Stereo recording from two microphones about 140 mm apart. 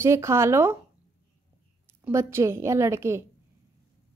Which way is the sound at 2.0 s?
20° right (ahead or behind).